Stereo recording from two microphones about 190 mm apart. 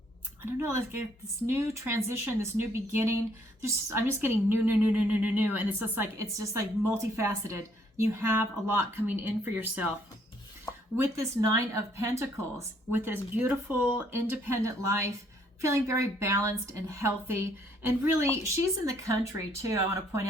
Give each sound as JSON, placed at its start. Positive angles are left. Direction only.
{"t": 0.4, "sound": "speech", "side_deg": -15}
{"t": 10.9, "sound": "speech", "side_deg": -15}